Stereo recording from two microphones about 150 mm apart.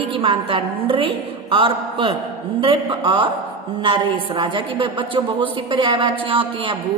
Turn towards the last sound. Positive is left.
turn(degrees=-35)  # may be behind; listen again after turning